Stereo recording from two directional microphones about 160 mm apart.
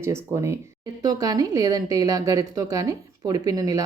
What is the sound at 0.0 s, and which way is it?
A woman's voice, 15° right (ahead or behind).